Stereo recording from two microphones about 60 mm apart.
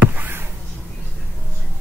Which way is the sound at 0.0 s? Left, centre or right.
Right.